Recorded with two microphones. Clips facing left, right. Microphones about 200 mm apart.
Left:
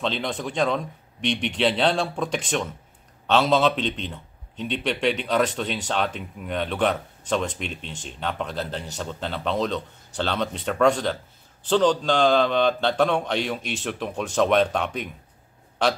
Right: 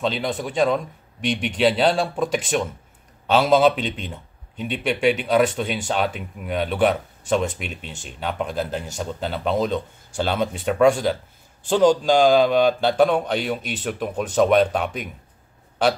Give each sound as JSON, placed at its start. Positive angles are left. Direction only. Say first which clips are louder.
{"t": 0.0, "sound": "a man's voice", "louder": "right 3 dB", "side_deg": -5}